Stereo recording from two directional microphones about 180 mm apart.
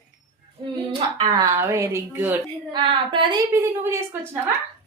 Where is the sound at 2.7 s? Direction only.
25° right (ahead or behind).